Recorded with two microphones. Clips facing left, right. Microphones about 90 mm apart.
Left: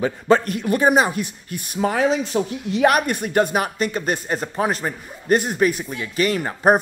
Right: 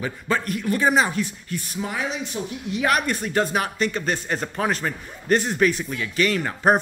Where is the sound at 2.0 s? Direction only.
90° left.